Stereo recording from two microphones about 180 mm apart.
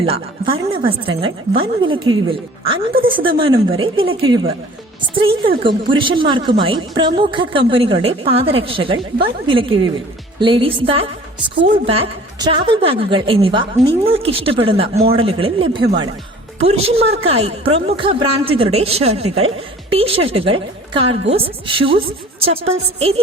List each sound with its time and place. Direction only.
0.0 s a woman's voice: 30° right (ahead or behind)